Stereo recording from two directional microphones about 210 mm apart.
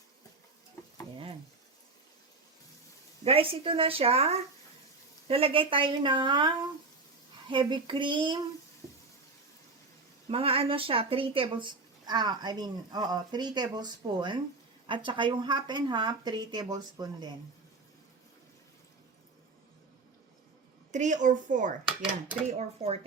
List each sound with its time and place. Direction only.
0.8 s tick-tock: 15° left (ahead or behind)
1.1 s a sound: 25° right (ahead or behind)
3.2 s speech: 25° right (ahead or behind)
10.2 s speech: 25° right (ahead or behind)
20.9 s a woman's voice: 35° right (ahead or behind)